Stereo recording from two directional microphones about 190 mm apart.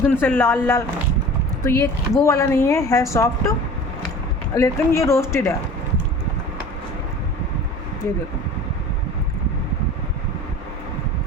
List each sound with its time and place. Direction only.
0.1 s speech: 10° left (ahead or behind)
4.5 s speech: 15° left (ahead or behind)